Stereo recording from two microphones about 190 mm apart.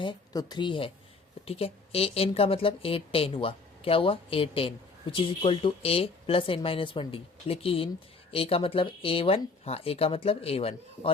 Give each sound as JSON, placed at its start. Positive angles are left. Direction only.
{"t": 0.0, "sound": "a woman's voice", "side_deg": 25}